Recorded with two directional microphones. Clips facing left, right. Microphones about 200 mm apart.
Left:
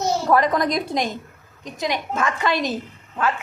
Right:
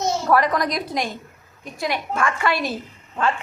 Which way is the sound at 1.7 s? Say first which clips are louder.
Even; 20° left (ahead or behind).